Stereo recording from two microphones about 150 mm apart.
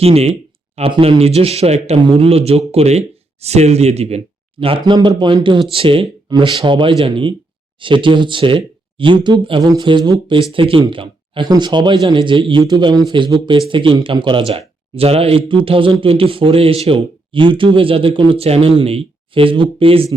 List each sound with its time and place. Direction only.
0.0 s speech: 45° right (ahead or behind)
4.6 s speech: 35° right (ahead or behind)